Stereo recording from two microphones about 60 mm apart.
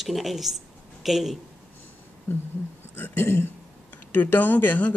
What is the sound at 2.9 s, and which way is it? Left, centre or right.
Speech, left.